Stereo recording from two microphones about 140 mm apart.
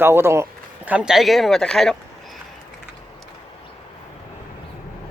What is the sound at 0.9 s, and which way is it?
Speech, 5° right (ahead or behind).